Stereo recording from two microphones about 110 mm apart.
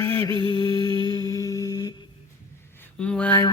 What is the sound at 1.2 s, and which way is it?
Humming, 35° left (ahead or behind).